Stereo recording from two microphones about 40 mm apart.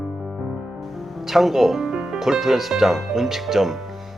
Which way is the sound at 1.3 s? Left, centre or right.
Centre.